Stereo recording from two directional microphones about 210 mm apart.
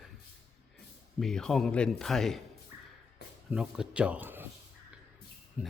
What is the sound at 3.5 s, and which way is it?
Speech, 5° right (ahead or behind).